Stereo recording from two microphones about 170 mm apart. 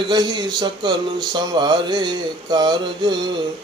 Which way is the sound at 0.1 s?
25° right (ahead or behind).